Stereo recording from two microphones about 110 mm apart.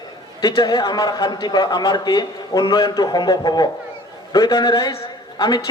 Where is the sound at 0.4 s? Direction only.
40° left (ahead or behind).